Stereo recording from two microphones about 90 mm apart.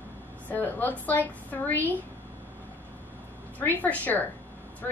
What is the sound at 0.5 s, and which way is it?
A woman's voice, 20° left (ahead or behind).